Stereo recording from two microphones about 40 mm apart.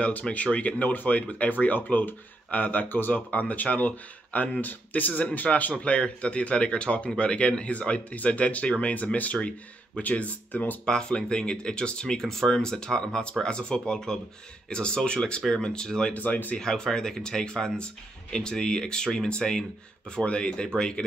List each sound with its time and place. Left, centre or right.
0.0 s speech: left
3.3 s speech: left
10.9 s speech: left
16.1 s speech: left
16.5 s speech: centre